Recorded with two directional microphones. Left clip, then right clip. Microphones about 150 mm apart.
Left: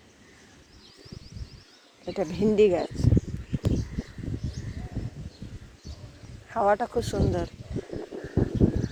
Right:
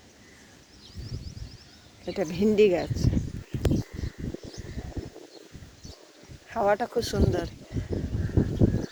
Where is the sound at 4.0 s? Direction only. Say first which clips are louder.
Left 2 dB; 55° right (ahead or behind).